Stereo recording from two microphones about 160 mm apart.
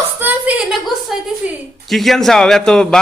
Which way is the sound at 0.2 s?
10° right (ahead or behind).